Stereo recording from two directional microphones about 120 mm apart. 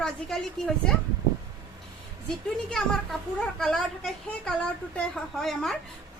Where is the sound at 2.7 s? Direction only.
5° left (ahead or behind).